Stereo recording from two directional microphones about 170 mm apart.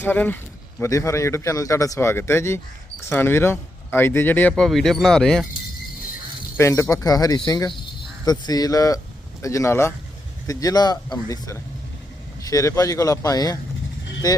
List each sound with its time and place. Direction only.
0.0 s speech: 10° left (ahead or behind)
6.6 s speech: 15° left (ahead or behind)